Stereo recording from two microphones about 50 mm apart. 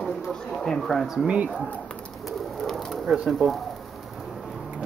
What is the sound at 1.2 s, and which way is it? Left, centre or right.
Speech, right.